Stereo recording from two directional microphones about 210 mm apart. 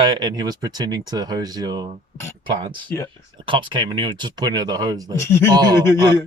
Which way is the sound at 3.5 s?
25° right (ahead or behind).